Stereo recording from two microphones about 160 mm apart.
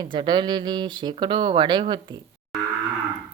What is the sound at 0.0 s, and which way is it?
Speech, 30° right (ahead or behind).